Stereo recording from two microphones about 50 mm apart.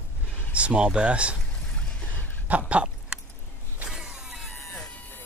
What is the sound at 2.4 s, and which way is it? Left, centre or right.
Speech, right.